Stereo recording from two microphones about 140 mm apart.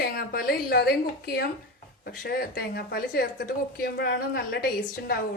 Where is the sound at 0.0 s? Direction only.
90° left.